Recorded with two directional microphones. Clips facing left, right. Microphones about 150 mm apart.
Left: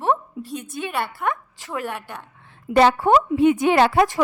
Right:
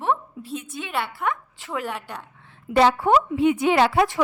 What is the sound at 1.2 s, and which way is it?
Speech, centre (ahead or behind).